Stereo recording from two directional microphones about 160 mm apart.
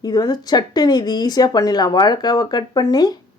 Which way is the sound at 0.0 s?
25° left (ahead or behind).